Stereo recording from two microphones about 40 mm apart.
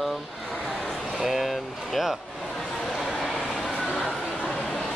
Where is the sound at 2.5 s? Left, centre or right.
Centre.